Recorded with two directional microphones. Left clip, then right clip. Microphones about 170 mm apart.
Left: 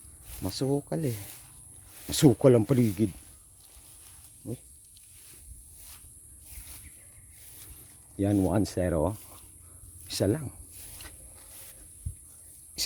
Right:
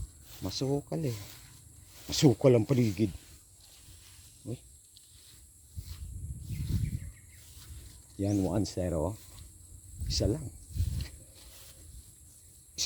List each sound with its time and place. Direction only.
0.4 s speech: 35° left (ahead or behind)
4.4 s a sound: 15° left (ahead or behind)
8.2 s speech: 40° left (ahead or behind)